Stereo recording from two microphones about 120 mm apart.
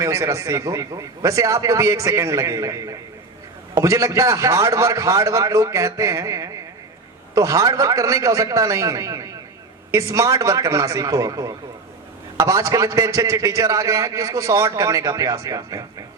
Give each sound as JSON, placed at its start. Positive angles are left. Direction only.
{"t": 0.0, "sound": "a man's voice", "side_deg": -25}